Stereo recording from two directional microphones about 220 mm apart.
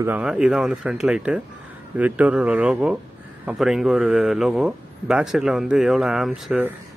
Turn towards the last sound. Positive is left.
turn(degrees=-5)  # may be behind; listen again after turning